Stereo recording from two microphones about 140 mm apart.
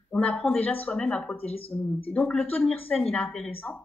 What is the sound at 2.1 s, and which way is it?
A woman's voice, 5° left (ahead or behind).